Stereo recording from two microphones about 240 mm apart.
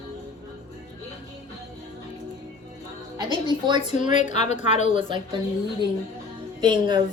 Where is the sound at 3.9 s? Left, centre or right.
Left.